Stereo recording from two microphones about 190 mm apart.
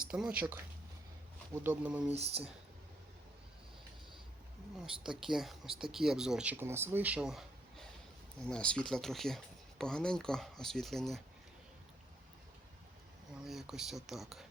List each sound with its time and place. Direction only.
0.1 s speech: 5° right (ahead or behind)
1.6 s speech: 10° right (ahead or behind)
2.1 s speech: 35° right (ahead or behind)
5.0 s speech: centre (ahead or behind)
13.4 s speech: centre (ahead or behind)